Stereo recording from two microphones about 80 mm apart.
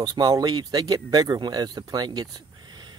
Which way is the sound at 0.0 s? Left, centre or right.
Right.